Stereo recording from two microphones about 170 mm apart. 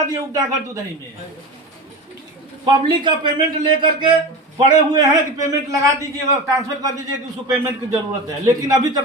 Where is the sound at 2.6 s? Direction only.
25° right (ahead or behind).